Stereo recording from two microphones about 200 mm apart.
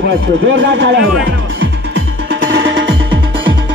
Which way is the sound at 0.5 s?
75° right (ahead or behind).